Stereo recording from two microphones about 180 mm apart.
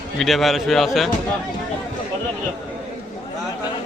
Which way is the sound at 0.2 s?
Centre (ahead or behind).